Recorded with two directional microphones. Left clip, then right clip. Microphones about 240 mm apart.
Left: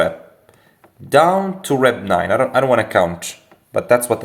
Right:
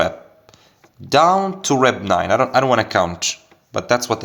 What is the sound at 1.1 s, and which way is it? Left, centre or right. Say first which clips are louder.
Speech: left 1 dB; right.